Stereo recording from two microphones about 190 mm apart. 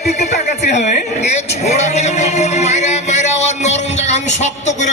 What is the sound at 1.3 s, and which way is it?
Speech, 35° left (ahead or behind).